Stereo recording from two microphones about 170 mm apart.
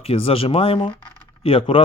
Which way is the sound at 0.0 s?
35° left (ahead or behind).